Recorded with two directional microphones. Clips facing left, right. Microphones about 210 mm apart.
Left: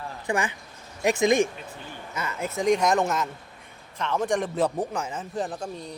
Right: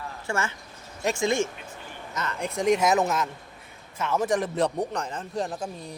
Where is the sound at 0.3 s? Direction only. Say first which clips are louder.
Left 3 dB; 15° left (ahead or behind).